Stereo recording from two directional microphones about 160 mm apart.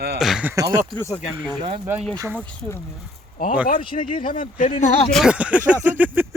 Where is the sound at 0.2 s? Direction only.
5° right (ahead or behind).